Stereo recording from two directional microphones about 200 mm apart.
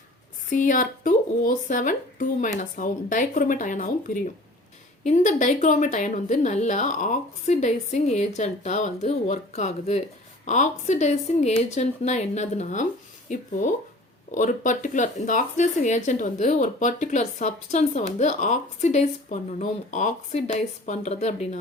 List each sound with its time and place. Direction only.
0.5 s speech: 40° left (ahead or behind)